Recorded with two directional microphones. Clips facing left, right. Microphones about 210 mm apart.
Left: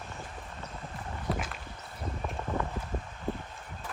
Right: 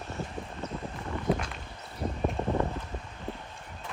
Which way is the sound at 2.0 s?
30° right (ahead or behind).